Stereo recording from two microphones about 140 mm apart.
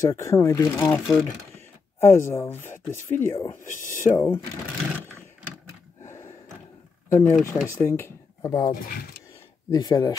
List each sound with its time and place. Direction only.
0.0 s speech: 25° left (ahead or behind)
0.9 s speech: centre (ahead or behind)
2.0 s speech: 20° left (ahead or behind)
3.6 s speech: 70° left (ahead or behind)
4.1 s speech: 15° left (ahead or behind)
6.0 s gasp: 20° left (ahead or behind)
7.1 s speech: 15° left (ahead or behind)